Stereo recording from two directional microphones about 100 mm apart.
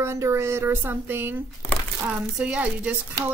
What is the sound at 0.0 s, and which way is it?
A woman's voice, 30° right (ahead or behind).